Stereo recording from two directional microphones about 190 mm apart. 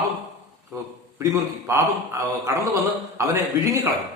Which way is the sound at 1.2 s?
15° right (ahead or behind).